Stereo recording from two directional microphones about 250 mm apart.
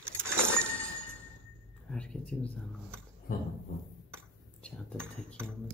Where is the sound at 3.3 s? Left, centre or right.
Left.